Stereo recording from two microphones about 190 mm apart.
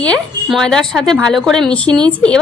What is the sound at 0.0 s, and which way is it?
A woman's voice, 5° left (ahead or behind).